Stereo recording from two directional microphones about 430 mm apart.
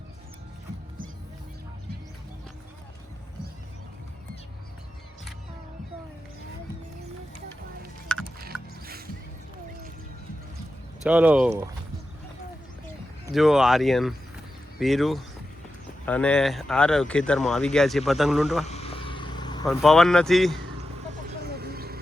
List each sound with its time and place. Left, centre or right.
8.0 s a sound: centre
8.5 s music: centre
11.0 s speech: centre
13.3 s speech: centre
18.6 s vehicle: centre
21.4 s vehicle: right